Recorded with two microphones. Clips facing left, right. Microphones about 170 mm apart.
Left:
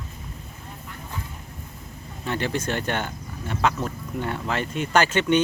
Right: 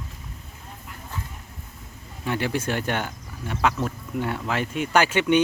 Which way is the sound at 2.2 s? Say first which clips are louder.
Right 1 dB; 10° right (ahead or behind).